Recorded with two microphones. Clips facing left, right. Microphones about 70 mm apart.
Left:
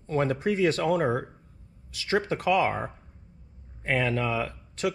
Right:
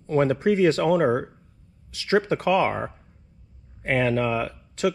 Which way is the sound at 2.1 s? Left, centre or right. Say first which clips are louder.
Right 4 dB; right.